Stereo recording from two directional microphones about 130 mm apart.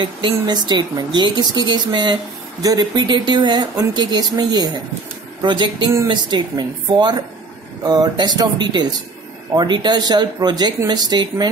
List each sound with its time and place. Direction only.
0.0 s speech: 35° right (ahead or behind)